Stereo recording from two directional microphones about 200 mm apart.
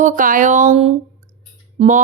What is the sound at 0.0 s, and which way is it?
Speech, 40° right (ahead or behind).